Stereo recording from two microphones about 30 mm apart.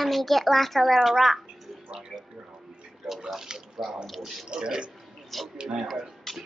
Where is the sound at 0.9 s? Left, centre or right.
Centre.